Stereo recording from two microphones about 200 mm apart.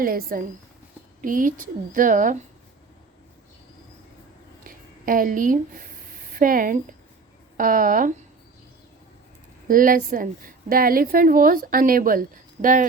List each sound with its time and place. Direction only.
0.0 s a woman's voice: 45° right (ahead or behind)
4.6 s a sound: 45° right (ahead or behind)
7.5 s a woman's voice: 45° right (ahead or behind)
9.6 s a woman's voice: 45° right (ahead or behind)